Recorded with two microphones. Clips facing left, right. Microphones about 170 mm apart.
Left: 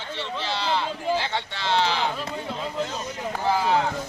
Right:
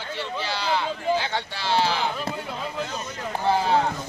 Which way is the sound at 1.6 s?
20° left (ahead or behind).